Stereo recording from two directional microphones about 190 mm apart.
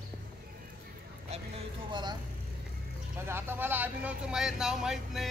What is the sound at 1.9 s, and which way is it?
Speech, 25° right (ahead or behind).